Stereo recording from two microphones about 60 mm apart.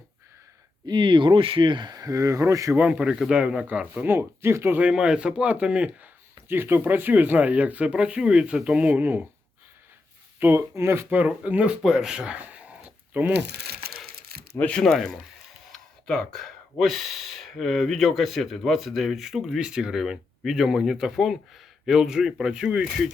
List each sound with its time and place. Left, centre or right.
2.0 s speech: right
2.7 s speech: right
4.0 s speech: right
4.8 s speech: centre
6.3 s speech: right
9.0 s speech: right
10.4 s speech: right
11.1 s speech: right
11.8 s a sound: centre; by 13.3 s right
14.8 s speech: centre